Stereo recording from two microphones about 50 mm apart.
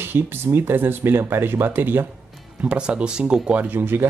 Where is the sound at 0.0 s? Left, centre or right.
Right.